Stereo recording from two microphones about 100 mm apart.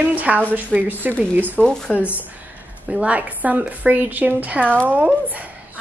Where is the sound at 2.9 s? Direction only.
15° right (ahead or behind).